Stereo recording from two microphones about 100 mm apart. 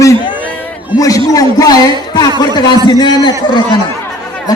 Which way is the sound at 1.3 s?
35° left (ahead or behind).